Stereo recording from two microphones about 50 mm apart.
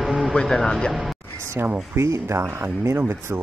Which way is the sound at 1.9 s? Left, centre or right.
Right.